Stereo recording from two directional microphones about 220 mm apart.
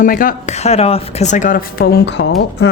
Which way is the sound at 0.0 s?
40° left (ahead or behind).